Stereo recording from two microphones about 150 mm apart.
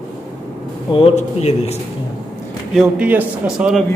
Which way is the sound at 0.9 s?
40° left (ahead or behind).